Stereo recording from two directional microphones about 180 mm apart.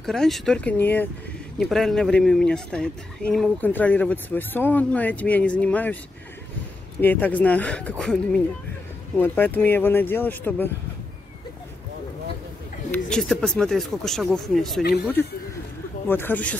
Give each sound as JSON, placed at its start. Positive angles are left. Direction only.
{"t": 0.0, "sound": "speech", "side_deg": 0}
{"t": 7.0, "sound": "speech", "side_deg": 10}
{"t": 12.9, "sound": "speech", "side_deg": 5}
{"t": 14.8, "sound": "speech", "side_deg": 65}
{"t": 16.1, "sound": "speech", "side_deg": 10}